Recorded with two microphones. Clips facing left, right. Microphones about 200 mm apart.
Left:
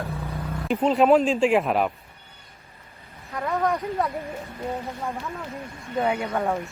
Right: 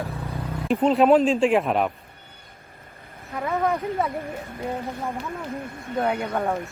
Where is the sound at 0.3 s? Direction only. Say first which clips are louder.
Right 3 dB; centre (ahead or behind).